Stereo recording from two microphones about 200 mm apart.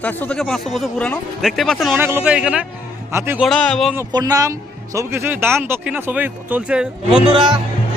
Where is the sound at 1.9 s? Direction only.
10° right (ahead or behind).